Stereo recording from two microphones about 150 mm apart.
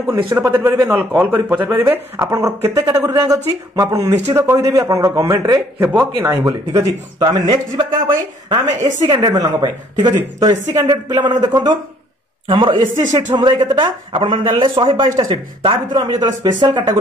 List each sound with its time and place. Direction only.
0.1 s a man's voice: 25° right (ahead or behind)
5.9 s a woman's voice: 15° right (ahead or behind)
8.7 s a woman's voice: 55° right (ahead or behind)
9.0 s a woman's voice: 30° right (ahead or behind)